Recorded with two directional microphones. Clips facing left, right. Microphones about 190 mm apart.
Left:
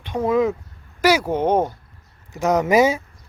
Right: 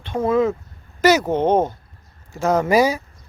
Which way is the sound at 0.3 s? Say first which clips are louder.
Right 1 dB; 15° left (ahead or behind).